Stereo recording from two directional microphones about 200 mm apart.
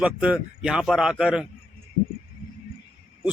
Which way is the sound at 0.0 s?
5° right (ahead or behind).